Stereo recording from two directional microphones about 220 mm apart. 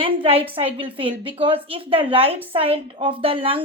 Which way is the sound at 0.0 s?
25° right (ahead or behind).